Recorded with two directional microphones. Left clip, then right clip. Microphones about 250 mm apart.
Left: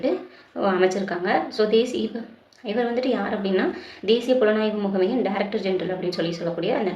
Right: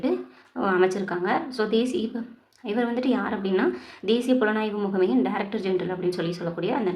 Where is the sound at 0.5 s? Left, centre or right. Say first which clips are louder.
Left 2 dB; centre.